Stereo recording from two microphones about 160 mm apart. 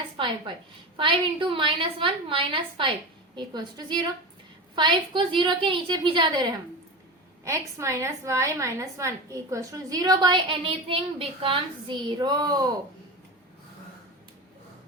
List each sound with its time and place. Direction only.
0.2 s a woman's voice: 30° right (ahead or behind)
7.4 s a woman's voice: 20° right (ahead or behind)